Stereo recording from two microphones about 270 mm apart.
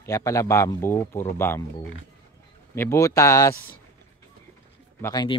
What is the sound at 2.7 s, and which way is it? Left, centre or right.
Speech, centre.